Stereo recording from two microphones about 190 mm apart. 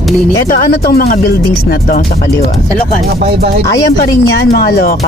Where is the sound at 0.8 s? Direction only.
55° left (ahead or behind).